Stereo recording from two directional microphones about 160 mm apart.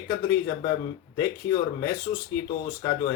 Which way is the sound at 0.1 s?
25° left (ahead or behind).